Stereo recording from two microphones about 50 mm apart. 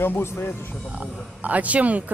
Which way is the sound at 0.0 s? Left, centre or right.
Left.